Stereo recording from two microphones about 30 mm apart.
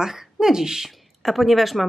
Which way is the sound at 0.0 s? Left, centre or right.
Centre.